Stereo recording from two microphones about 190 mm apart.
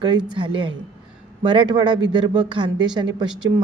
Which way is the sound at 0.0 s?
25° right (ahead or behind).